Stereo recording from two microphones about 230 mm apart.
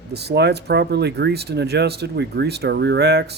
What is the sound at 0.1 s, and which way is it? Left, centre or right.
Speech, right.